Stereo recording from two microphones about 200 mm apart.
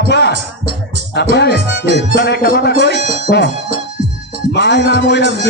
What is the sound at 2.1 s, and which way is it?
Music, 50° left (ahead or behind).